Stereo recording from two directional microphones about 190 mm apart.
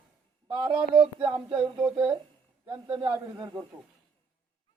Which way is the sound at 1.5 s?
Centre (ahead or behind).